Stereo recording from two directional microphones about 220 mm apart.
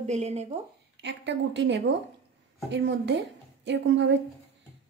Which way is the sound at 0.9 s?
55° right (ahead or behind).